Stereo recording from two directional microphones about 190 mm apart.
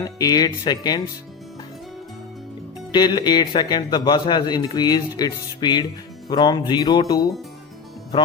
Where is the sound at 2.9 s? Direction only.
20° left (ahead or behind).